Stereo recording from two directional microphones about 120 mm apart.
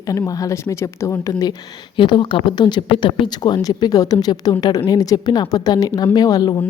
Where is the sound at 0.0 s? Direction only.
30° left (ahead or behind).